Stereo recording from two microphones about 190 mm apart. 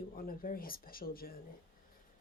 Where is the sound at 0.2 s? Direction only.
50° left (ahead or behind).